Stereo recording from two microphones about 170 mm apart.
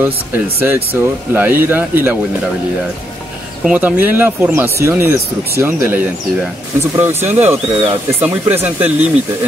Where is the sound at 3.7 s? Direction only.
10° right (ahead or behind).